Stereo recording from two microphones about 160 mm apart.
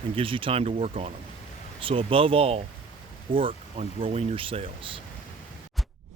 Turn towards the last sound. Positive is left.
turn(degrees=-35)  # may be behind; listen again after turning